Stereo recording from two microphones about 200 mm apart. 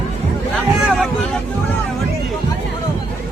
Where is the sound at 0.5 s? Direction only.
Centre (ahead or behind).